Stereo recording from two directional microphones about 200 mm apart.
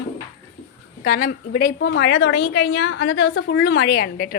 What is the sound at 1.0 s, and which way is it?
Speech, 50° left (ahead or behind).